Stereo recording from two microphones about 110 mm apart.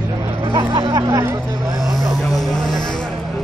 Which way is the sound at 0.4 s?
50° right (ahead or behind).